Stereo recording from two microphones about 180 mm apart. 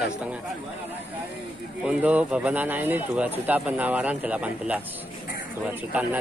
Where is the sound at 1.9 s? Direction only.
10° right (ahead or behind).